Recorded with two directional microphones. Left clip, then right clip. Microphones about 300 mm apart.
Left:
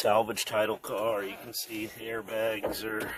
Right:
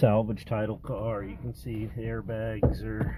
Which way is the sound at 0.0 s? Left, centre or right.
Centre.